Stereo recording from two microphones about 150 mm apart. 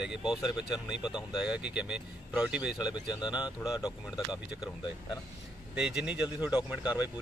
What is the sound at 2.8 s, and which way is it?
Speech, 30° left (ahead or behind).